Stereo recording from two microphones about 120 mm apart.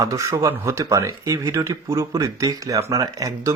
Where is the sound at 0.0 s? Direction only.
25° right (ahead or behind).